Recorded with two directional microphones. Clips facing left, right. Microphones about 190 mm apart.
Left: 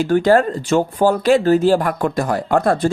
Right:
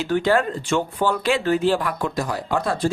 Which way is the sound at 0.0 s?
45° left (ahead or behind).